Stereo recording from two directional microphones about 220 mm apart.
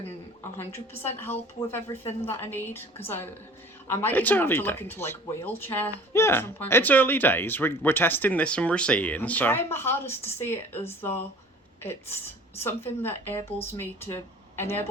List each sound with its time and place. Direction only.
0.5 s speech: 10° left (ahead or behind)
11.8 s speech: 10° left (ahead or behind)